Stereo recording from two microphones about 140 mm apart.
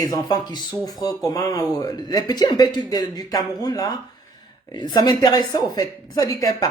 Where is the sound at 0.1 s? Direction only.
25° left (ahead or behind).